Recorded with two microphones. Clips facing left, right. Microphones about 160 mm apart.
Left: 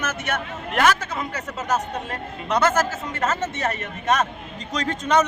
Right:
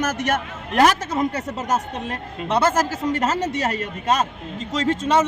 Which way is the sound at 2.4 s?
30° right (ahead or behind).